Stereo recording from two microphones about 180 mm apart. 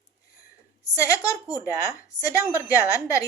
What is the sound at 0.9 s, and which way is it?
Speech, 15° left (ahead or behind).